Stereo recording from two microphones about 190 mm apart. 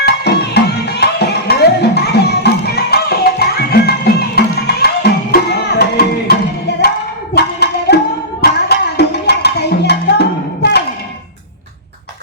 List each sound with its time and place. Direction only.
0.0 s music: 60° left (ahead or behind)
7.3 s music: 60° left (ahead or behind)